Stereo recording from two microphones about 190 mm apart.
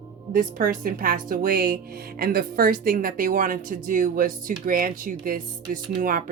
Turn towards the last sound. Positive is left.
turn(degrees=-45)  # may be behind; listen again after turning